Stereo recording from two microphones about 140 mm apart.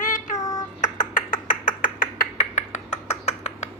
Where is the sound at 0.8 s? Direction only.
65° left (ahead or behind).